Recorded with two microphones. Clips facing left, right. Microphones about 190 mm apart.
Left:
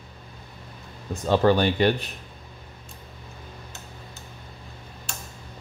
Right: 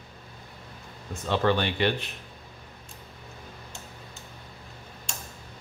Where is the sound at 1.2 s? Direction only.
40° left (ahead or behind).